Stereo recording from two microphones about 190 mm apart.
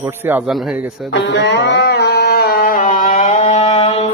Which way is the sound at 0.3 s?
5° right (ahead or behind).